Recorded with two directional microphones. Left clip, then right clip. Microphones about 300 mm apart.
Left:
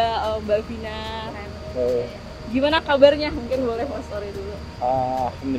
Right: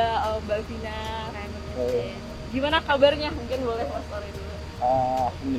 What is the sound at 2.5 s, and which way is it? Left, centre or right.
Speech, left.